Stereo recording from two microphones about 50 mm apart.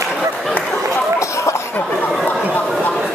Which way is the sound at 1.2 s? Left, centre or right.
Left.